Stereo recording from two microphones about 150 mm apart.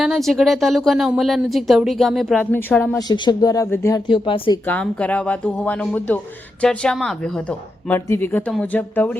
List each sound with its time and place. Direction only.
0.0 s speech: centre (ahead or behind)
2.4 s speech: 10° left (ahead or behind)
3.1 s speech: 25° left (ahead or behind)
4.1 s speech: 35° left (ahead or behind)
4.7 s speech: 10° left (ahead or behind)
7.9 s speech: 15° left (ahead or behind)